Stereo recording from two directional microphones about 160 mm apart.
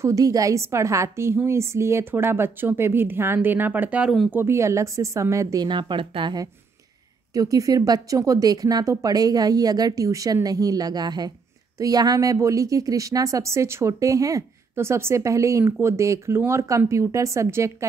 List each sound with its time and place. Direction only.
0.0 s a woman's voice: 20° right (ahead or behind); by 4.3 s 5° right (ahead or behind)
4.3 s speech: 15° right (ahead or behind)